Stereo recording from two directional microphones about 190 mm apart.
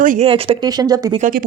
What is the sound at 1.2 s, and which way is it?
Speech, 45° right (ahead or behind).